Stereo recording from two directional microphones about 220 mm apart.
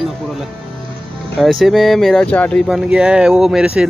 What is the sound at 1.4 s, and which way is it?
Speech, centre (ahead or behind).